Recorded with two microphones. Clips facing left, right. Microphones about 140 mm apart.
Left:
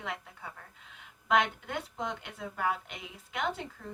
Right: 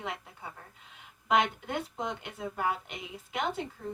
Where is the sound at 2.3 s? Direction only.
20° right (ahead or behind).